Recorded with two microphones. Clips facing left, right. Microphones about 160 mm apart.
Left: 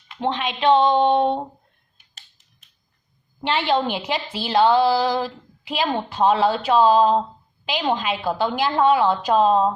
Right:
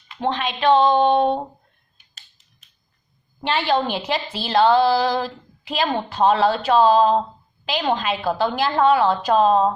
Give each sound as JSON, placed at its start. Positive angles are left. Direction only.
{"t": 0.2, "sound": "a woman's voice", "side_deg": 20}
{"t": 1.0, "sound": "a sound", "side_deg": -5}
{"t": 3.4, "sound": "a woman's voice", "side_deg": 20}